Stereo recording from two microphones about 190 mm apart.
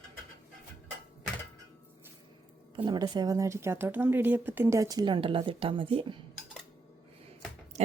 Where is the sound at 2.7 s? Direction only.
25° right (ahead or behind).